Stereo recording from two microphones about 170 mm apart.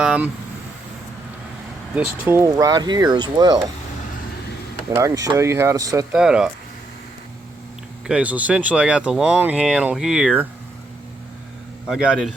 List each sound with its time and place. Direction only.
0.0 s speech: 5° right (ahead or behind)
2.1 s speech: 10° right (ahead or behind)
4.9 s speech: 20° right (ahead or behind)
6.1 s speech: 5° right (ahead or behind)
8.0 s speech: 5° right (ahead or behind)
11.9 s speech: 5° right (ahead or behind)